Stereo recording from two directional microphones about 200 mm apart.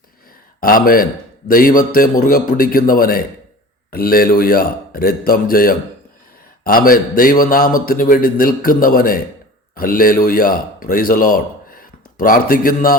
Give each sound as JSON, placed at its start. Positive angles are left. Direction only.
{"t": 0.6, "sound": "a man's voice", "side_deg": 45}